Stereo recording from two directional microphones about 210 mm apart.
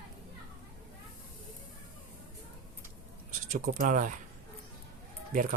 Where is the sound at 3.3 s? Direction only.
40° right (ahead or behind).